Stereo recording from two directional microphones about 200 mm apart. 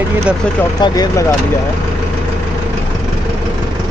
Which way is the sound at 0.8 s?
20° left (ahead or behind).